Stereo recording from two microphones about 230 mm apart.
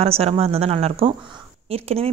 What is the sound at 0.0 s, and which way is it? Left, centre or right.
Speech, right.